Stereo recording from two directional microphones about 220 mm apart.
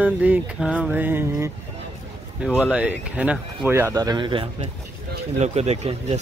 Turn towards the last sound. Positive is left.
turn(degrees=-30)  # may be behind; listen again after turning